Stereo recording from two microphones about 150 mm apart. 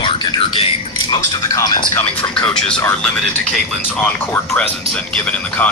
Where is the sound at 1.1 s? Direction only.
25° left (ahead or behind).